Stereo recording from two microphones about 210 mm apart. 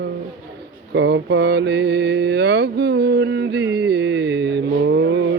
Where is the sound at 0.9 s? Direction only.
55° right (ahead or behind).